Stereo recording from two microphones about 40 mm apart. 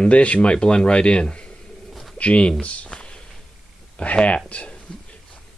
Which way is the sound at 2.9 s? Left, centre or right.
Left.